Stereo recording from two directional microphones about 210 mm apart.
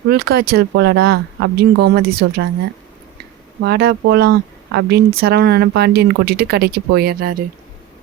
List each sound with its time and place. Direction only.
0.1 s speech: 50° right (ahead or behind)
3.6 s speech: 50° right (ahead or behind)